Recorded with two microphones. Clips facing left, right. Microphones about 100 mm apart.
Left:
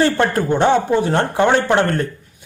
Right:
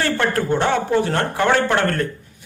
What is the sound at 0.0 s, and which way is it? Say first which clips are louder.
A man's voice: left 4 dB; 20° left (ahead or behind).